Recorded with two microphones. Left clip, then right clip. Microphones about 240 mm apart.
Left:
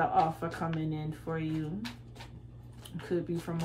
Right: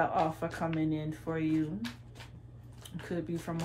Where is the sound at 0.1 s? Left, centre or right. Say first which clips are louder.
Left 3 dB; centre.